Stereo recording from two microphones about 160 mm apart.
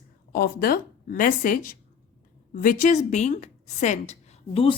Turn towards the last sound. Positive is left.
turn(degrees=40)  # may be behind; listen again after turning